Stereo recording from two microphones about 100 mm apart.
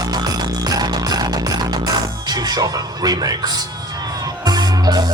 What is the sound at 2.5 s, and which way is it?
Speech, 40° right (ahead or behind).